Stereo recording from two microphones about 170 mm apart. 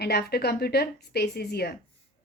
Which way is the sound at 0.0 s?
70° left (ahead or behind).